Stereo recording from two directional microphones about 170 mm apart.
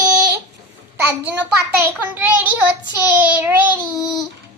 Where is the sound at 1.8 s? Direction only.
10° right (ahead or behind).